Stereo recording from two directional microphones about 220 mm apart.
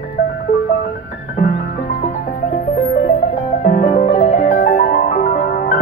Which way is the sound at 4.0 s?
30° left (ahead or behind).